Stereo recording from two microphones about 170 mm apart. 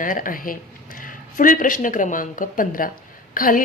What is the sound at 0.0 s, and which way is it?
A woman's voice, 55° left (ahead or behind).